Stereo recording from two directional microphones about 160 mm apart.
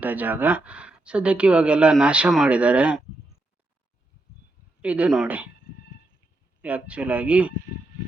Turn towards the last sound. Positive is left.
turn(degrees=-10)  # may be behind; listen again after turning